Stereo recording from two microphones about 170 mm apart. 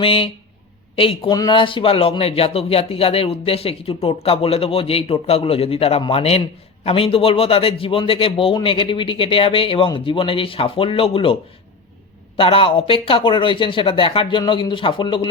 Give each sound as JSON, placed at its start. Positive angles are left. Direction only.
{"t": 0.0, "sound": "speech", "side_deg": 35}
{"t": 12.4, "sound": "speech", "side_deg": 30}